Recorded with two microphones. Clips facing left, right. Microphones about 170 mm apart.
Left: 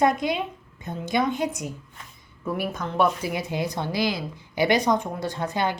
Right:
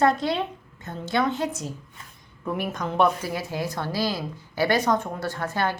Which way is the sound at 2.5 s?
5° left (ahead or behind).